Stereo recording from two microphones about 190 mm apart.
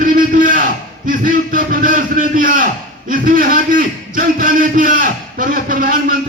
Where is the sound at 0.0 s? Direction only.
45° right (ahead or behind).